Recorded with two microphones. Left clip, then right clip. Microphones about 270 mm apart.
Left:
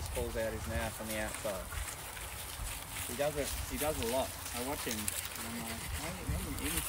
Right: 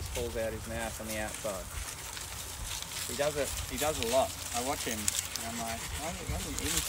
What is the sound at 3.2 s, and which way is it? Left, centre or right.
Speech, centre.